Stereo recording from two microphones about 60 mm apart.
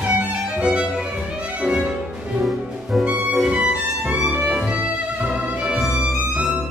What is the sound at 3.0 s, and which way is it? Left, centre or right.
Music, centre.